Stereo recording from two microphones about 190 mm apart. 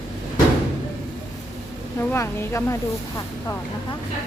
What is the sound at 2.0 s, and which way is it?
Speech, 15° left (ahead or behind).